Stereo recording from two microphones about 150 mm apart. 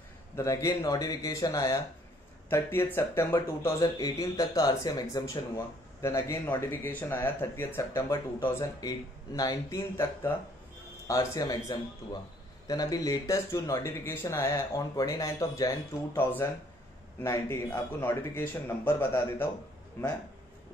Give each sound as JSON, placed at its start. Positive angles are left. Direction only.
{"t": 0.4, "sound": "speech", "side_deg": 20}